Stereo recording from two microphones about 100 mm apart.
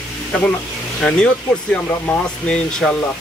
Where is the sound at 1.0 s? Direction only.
10° left (ahead or behind).